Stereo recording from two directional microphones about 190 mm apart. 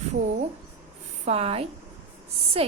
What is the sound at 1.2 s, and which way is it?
A woman's voice, 30° right (ahead or behind).